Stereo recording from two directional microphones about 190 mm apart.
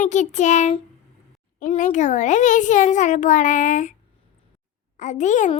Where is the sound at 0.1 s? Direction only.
40° left (ahead or behind).